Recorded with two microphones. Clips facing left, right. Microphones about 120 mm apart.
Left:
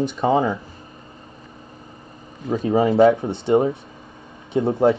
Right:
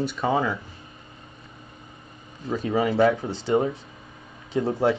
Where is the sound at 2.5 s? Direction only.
30° left (ahead or behind).